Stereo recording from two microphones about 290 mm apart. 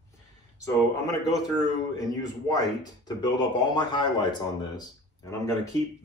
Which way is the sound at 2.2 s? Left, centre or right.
Centre.